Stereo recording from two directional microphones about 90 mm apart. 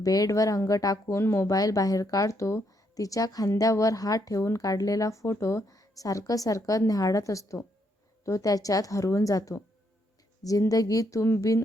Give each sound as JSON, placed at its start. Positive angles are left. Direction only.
{"t": 0.0, "sound": "a woman's voice", "side_deg": 40}